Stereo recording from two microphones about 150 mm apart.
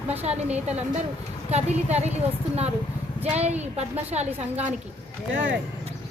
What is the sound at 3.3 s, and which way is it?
Speech, 45° right (ahead or behind).